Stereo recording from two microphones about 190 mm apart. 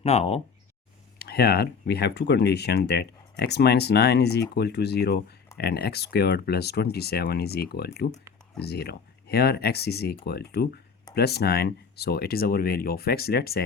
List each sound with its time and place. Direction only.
0.0 s speech: 35° left (ahead or behind)
1.2 s speech: 55° left (ahead or behind)